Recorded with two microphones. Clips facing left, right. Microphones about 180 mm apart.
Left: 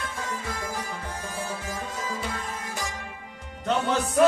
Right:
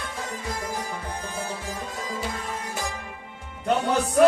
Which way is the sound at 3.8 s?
35° right (ahead or behind).